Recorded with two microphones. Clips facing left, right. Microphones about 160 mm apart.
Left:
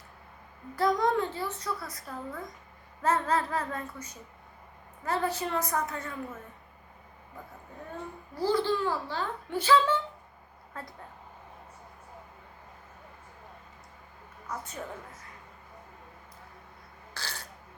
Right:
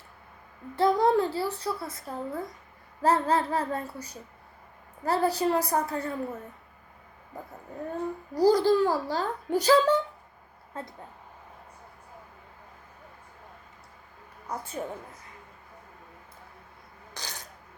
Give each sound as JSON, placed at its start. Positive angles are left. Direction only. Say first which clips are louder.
{"t": 0.8, "sound": "a child's voice", "louder": "right 4 dB", "side_deg": -30}
{"t": 8.4, "sound": "a child's voice", "louder": "right 7 dB", "side_deg": -40}
{"t": 10.8, "sound": "a woman's voice", "louder": "right 4 dB", "side_deg": -25}
{"t": 14.4, "sound": "a woman's voice", "louder": "right 3 dB", "side_deg": -30}
{"t": 17.2, "sound": "a sound", "louder": "even", "side_deg": -15}